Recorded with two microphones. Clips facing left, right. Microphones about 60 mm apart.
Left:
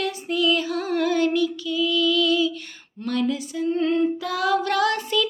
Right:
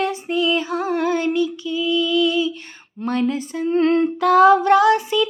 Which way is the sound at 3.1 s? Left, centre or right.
Right.